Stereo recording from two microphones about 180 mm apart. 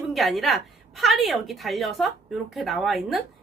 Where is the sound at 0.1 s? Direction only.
Centre (ahead or behind).